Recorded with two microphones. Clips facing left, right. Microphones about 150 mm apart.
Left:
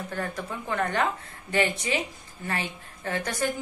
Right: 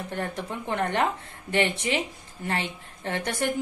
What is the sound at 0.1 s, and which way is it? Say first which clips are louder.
Speech: right 2 dB; 25° right (ahead or behind).